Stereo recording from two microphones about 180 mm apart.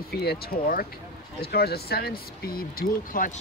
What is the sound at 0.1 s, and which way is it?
Speech, 60° left (ahead or behind).